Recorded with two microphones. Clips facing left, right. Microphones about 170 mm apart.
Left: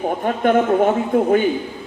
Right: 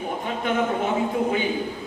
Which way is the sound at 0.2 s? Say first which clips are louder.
Left 8 dB; 50° left (ahead or behind).